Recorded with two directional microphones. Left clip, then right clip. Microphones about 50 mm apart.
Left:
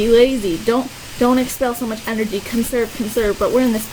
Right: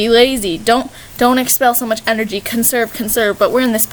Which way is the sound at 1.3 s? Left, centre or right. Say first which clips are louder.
Right 6 dB; right.